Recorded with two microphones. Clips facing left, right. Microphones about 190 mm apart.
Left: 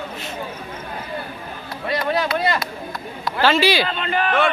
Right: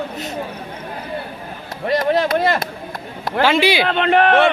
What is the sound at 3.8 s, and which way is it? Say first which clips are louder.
Speech: right 8 dB; 65° right (ahead or behind).